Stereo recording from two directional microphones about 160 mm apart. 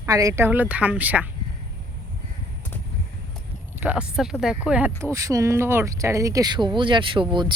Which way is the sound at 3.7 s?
10° right (ahead or behind).